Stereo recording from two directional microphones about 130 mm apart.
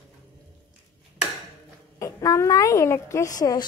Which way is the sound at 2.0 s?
25° left (ahead or behind).